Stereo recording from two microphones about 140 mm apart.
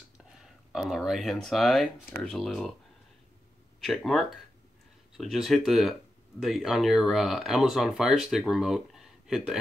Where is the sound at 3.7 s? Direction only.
Centre (ahead or behind).